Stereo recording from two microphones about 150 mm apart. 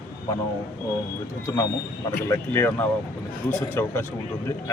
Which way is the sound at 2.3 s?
15° left (ahead or behind).